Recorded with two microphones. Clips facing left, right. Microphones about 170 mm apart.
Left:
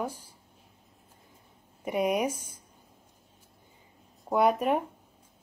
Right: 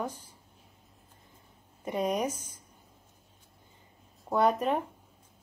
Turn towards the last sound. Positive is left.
turn(degrees=10)  # may be behind; listen again after turning